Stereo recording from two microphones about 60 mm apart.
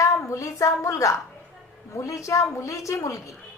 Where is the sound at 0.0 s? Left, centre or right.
Left.